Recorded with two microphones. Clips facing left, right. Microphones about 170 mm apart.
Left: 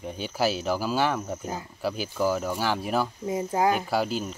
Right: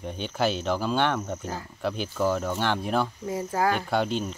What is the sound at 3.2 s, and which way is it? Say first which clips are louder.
Speech: left 2 dB; 20° left (ahead or behind).